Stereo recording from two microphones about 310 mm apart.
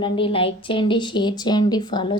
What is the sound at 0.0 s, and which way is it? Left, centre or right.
A woman's voice, centre.